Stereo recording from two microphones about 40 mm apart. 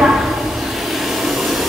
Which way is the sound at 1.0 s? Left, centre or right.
Centre.